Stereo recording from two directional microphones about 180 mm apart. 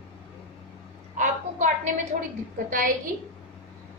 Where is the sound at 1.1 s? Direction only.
40° right (ahead or behind).